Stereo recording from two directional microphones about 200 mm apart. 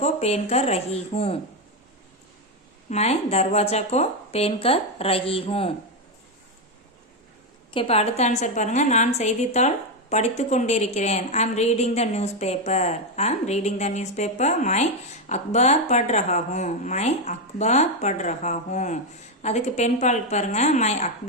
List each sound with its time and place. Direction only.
0.0 s a woman's voice: 35° left (ahead or behind)
2.9 s a woman's voice: 30° left (ahead or behind)
7.7 s a woman's voice: 30° left (ahead or behind)